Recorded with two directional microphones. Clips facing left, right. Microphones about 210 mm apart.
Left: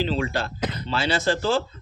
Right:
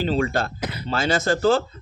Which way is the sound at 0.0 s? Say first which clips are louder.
Right 3 dB; 45° right (ahead or behind).